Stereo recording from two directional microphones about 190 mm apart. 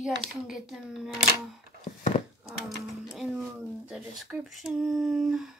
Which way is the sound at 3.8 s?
5° right (ahead or behind).